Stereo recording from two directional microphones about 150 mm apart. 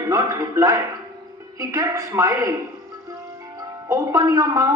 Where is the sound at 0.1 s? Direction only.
20° right (ahead or behind).